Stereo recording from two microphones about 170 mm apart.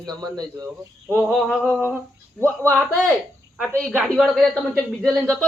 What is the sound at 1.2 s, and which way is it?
Speech, centre (ahead or behind).